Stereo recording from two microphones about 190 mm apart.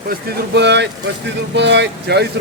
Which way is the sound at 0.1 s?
65° right (ahead or behind).